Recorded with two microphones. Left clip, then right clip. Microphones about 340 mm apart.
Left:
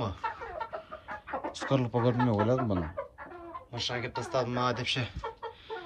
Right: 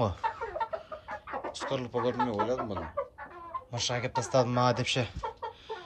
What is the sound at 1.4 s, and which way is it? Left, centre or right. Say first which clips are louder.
Speech: left 4 dB; centre.